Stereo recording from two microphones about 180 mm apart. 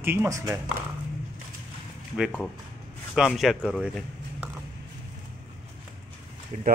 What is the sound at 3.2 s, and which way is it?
Speech, centre (ahead or behind).